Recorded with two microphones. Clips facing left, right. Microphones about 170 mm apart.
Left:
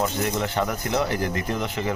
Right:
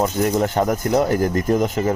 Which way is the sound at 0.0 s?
45° right (ahead or behind).